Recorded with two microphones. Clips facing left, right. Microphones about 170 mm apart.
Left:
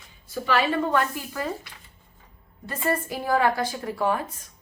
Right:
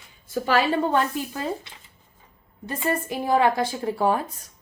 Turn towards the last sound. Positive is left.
turn(degrees=-30)  # may be behind; listen again after turning